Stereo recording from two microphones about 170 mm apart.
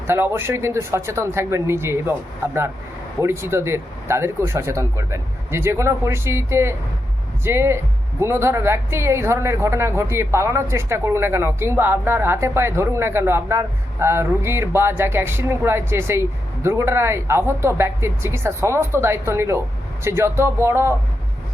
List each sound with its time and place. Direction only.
0.1 s a woman's voice: 15° right (ahead or behind)